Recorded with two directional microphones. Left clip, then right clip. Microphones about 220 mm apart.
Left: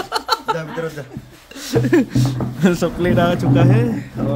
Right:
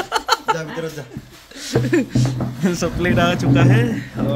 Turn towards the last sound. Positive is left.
turn(degrees=10)  # may be behind; listen again after turning